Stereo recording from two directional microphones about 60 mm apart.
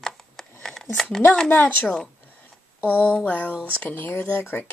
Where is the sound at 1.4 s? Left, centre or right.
Left.